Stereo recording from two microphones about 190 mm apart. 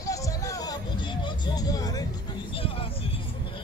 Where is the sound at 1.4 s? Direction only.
20° left (ahead or behind).